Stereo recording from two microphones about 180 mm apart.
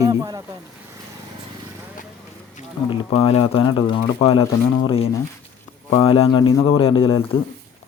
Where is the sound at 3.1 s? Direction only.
35° left (ahead or behind).